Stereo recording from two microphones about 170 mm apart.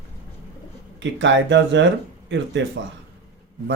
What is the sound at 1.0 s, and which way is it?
Speech, 90° right.